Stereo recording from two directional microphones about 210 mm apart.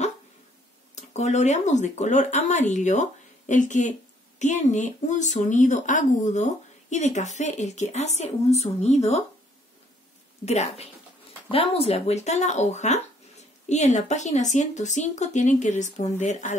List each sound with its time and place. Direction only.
0.9 s speech: 35° left (ahead or behind)
10.4 s speech: 30° left (ahead or behind)